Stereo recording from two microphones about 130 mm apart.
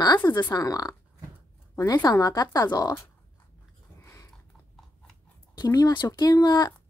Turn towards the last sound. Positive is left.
turn(degrees=30)  # may be behind; listen again after turning